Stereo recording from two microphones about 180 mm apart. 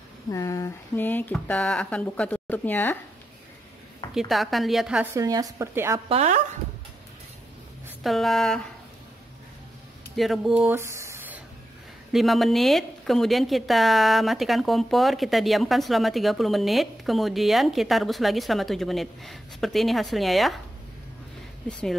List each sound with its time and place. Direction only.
0.3 s speech: 20° left (ahead or behind)
4.1 s a woman's voice: centre (ahead or behind)
5.1 s speech: 20° right (ahead or behind)
6.0 s speech: 35° right (ahead or behind)
8.0 s a woman's voice: centre (ahead or behind)
10.1 s speech: centre (ahead or behind)
12.1 s a woman's voice: centre (ahead or behind)